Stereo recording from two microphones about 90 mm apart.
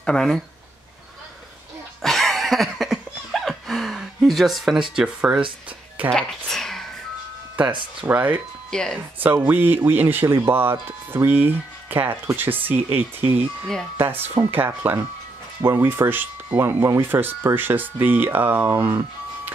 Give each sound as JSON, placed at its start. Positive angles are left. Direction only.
{"t": 0.0, "sound": "speech", "side_deg": 5}
{"t": 2.0, "sound": "a sound", "side_deg": 5}
{"t": 6.1, "sound": "a sound", "side_deg": 5}
{"t": 8.0, "sound": "speech", "side_deg": -20}
{"t": 8.6, "sound": "speech", "side_deg": 5}
{"t": 8.9, "sound": "speech", "side_deg": -20}